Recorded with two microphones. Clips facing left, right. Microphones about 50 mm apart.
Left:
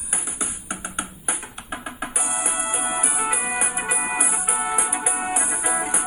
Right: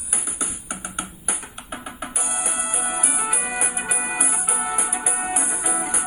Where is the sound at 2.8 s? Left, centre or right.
Centre.